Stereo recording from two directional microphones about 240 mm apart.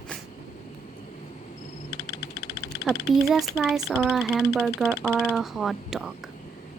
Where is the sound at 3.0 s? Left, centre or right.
Centre.